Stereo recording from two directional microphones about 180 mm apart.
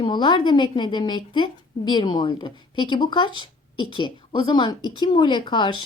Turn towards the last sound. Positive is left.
turn(degrees=25)  # may be behind; listen again after turning